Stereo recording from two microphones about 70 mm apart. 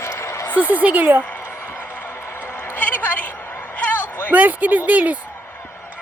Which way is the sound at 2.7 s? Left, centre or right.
Left.